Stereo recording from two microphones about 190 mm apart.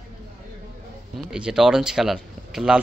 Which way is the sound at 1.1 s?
5° right (ahead or behind).